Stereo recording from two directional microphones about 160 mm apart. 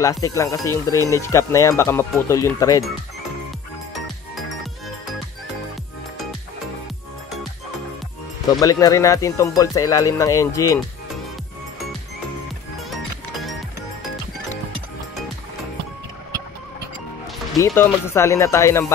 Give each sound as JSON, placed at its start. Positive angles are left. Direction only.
{"t": 0.0, "sound": "speech", "side_deg": 20}
{"t": 8.5, "sound": "speech", "side_deg": 20}
{"t": 17.6, "sound": "speech", "side_deg": 15}